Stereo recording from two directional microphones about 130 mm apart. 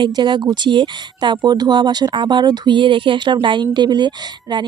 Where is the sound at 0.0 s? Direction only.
35° right (ahead or behind).